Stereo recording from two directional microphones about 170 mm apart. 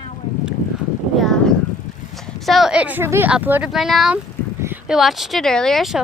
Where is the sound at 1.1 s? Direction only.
5° left (ahead or behind).